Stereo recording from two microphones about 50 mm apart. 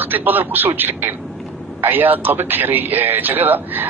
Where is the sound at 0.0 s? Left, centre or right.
Right.